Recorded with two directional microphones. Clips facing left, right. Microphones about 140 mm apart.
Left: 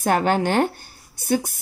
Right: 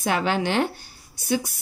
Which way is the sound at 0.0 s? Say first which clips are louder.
Left 4 dB; 45° left (ahead or behind).